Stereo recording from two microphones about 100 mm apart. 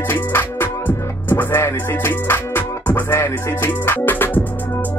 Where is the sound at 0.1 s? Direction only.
20° left (ahead or behind).